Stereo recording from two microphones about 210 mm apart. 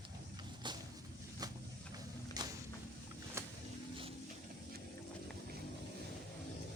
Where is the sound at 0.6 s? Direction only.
20° right (ahead or behind).